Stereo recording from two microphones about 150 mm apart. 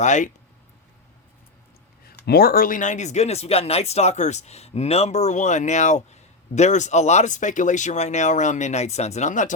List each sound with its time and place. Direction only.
0.0 s speech: 55° left (ahead or behind)
2.0 s speech: 90° left; by 9.5 s 55° left (ahead or behind)